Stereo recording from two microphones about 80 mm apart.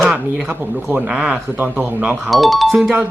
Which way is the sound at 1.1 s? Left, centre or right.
Centre.